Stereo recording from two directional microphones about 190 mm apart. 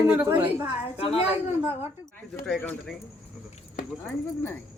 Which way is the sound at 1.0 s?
30° left (ahead or behind).